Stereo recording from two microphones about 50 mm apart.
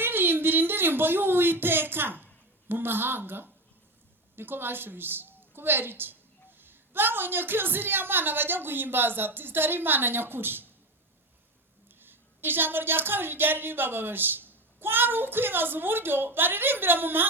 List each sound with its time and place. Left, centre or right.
0.0 s a woman's voice: right
11.9 s speech: right